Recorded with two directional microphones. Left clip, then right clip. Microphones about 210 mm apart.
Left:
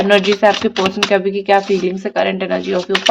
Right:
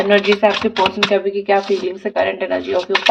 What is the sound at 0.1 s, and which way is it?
A woman's voice, 45° left (ahead or behind).